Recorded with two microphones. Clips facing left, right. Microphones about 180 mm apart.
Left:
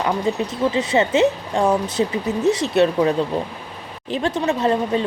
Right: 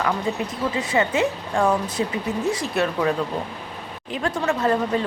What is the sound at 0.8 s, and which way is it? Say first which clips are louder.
Speech: left 4 dB; 20° left (ahead or behind).